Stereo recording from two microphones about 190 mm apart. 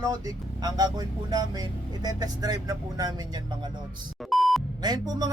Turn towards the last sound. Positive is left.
turn(degrees=-20)  # may be behind; listen again after turning